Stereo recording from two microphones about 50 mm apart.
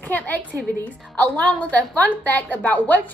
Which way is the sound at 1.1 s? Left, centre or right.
Left.